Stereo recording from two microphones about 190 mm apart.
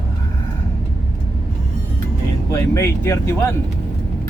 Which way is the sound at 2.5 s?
15° left (ahead or behind).